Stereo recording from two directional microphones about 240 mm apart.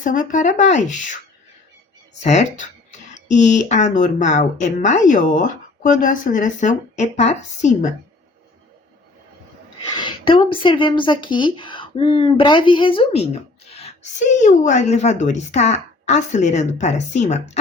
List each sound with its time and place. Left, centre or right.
0.0 s speech: left
2.2 s speech: left
9.9 s speech: centre